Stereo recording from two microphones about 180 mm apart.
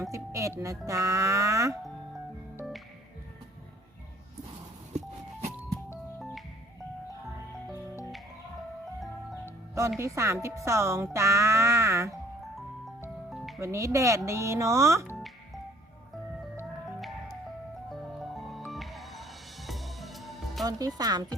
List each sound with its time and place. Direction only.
0.0 s speech: 15° right (ahead or behind)
4.9 s music: 40° right (ahead or behind)
7.7 s music: 20° left (ahead or behind)
9.3 s music: 15° right (ahead or behind)
10.0 s speech: 15° right (ahead or behind)
13.3 s music: centre (ahead or behind)
13.6 s speech: 15° right (ahead or behind)
17.9 s music: centre (ahead or behind)
20.7 s speech: 20° right (ahead or behind)